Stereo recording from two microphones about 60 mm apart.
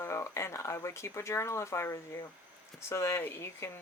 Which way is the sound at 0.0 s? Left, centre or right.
Left.